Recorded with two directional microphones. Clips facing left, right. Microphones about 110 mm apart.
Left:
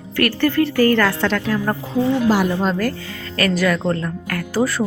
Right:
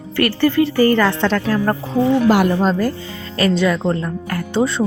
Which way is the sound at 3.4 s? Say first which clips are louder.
Right 2 dB; 25° right (ahead or behind).